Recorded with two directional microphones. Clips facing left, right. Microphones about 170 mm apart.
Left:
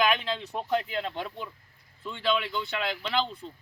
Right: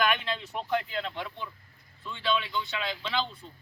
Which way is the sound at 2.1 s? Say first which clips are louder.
Left 2 dB; 45° left (ahead or behind).